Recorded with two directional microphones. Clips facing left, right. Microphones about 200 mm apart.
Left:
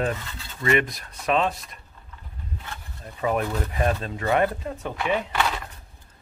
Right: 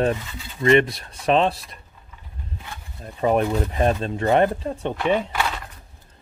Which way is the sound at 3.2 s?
30° right (ahead or behind).